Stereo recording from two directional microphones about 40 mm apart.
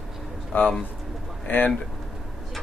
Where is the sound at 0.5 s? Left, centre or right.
Left.